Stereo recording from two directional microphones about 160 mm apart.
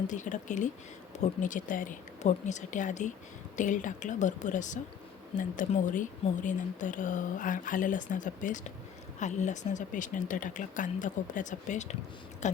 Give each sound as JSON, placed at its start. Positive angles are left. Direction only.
{"t": 0.1, "sound": "speech", "side_deg": 50}